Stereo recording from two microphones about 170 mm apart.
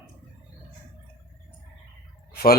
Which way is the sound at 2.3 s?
65° left (ahead or behind).